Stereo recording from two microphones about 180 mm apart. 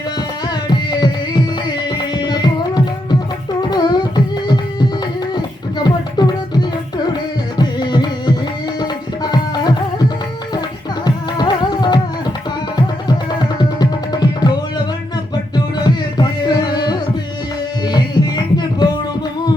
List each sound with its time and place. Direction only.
0.4 s tabla: 25° left (ahead or behind)
1.9 s music: 25° left (ahead or behind)
13.6 s music: 25° left (ahead or behind)